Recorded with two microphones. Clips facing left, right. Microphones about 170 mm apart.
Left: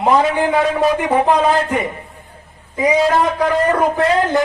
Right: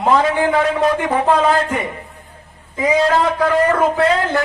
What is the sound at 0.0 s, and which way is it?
A man's voice, 15° left (ahead or behind).